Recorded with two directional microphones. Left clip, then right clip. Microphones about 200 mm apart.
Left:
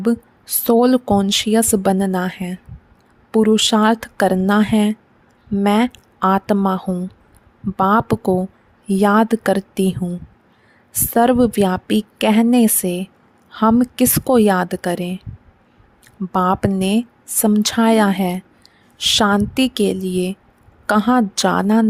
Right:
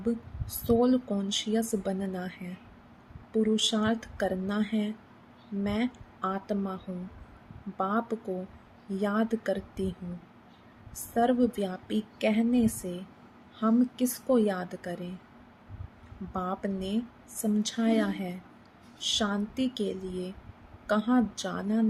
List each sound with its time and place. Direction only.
0.0 s speech: 55° left (ahead or behind)
11.1 s speech: 55° left (ahead or behind)
16.3 s speech: 55° left (ahead or behind)